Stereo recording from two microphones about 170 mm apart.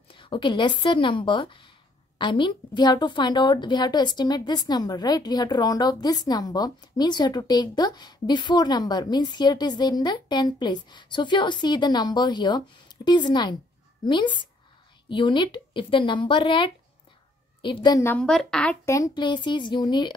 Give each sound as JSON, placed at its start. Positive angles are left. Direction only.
{"t": 0.1, "sound": "a woman's voice", "side_deg": 30}
{"t": 18.1, "sound": "a woman's voice", "side_deg": 5}
{"t": 18.9, "sound": "a woman's voice", "side_deg": 20}